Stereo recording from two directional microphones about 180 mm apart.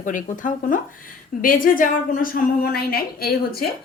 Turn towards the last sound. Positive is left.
turn(degrees=60)  # may be behind; listen again after turning